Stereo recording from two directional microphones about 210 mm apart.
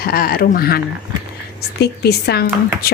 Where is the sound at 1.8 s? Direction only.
50° left (ahead or behind).